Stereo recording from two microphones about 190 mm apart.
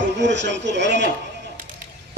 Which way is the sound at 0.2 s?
70° right (ahead or behind).